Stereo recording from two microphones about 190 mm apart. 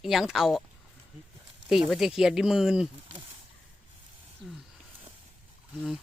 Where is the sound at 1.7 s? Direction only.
Centre (ahead or behind).